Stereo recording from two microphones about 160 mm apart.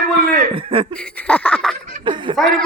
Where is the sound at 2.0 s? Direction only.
30° right (ahead or behind).